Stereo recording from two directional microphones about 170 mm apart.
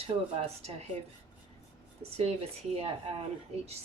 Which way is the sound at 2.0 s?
35° right (ahead or behind).